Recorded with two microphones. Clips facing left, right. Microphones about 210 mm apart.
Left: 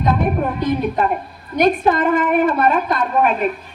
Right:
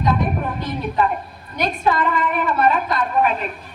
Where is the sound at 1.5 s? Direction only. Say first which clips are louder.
Left 6 dB; 50° left (ahead or behind).